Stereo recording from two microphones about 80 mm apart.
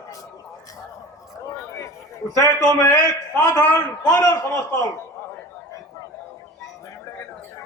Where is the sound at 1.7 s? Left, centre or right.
Left.